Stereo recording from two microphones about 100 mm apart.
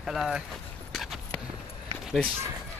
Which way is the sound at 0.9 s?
Centre (ahead or behind).